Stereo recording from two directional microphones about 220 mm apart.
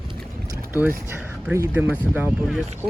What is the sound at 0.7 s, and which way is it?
Speech, 10° right (ahead or behind).